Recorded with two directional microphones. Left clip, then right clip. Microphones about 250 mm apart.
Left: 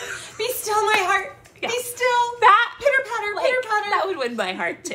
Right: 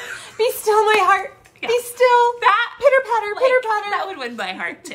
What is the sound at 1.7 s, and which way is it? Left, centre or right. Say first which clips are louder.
Speech: right 7 dB; centre.